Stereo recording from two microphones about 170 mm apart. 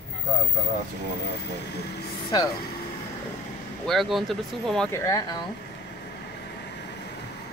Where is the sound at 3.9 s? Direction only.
Centre (ahead or behind).